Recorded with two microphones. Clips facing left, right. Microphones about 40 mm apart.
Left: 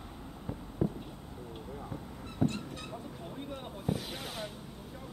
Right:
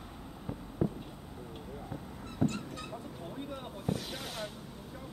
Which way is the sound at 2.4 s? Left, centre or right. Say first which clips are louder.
Even; centre.